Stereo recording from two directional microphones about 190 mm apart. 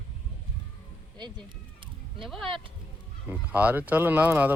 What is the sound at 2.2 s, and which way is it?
Speech, centre (ahead or behind).